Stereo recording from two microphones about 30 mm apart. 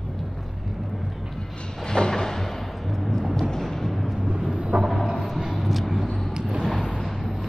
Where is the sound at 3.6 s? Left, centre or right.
Centre.